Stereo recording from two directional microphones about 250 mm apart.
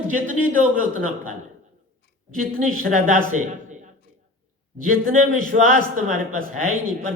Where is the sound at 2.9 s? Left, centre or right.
Right.